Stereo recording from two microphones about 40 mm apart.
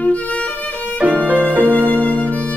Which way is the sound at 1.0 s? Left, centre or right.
Right.